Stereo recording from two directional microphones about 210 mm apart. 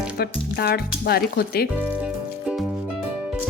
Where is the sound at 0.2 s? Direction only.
45° left (ahead or behind).